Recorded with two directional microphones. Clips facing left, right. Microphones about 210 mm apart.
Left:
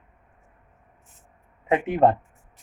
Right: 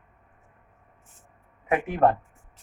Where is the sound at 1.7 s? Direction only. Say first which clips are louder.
Left 2 dB; 20° left (ahead or behind).